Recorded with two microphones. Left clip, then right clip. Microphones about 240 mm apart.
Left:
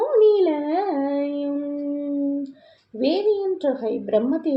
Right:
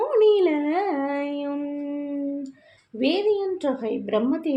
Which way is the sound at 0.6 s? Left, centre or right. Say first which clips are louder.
Left 1 dB; right.